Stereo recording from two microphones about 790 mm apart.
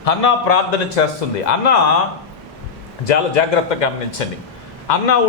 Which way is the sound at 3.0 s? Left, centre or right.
Left.